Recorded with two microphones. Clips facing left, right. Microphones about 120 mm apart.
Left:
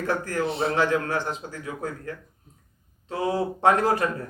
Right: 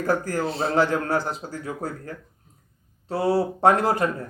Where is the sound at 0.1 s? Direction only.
35° right (ahead or behind).